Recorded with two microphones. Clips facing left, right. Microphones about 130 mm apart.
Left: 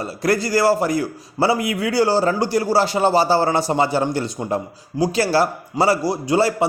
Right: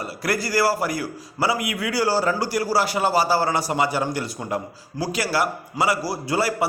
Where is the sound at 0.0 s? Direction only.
25° left (ahead or behind).